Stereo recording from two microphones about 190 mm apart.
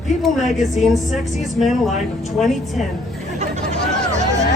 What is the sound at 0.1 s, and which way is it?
A woman's voice, centre (ahead or behind).